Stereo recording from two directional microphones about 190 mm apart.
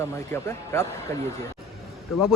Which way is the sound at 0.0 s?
15° left (ahead or behind).